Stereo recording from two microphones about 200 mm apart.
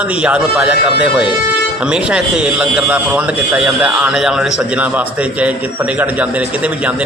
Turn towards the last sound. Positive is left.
turn(degrees=-5)  # may be behind; listen again after turning